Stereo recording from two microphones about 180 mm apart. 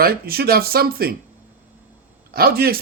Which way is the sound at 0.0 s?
55° right (ahead or behind).